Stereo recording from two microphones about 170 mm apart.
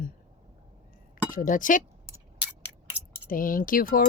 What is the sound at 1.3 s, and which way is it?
Speech, 50° left (ahead or behind).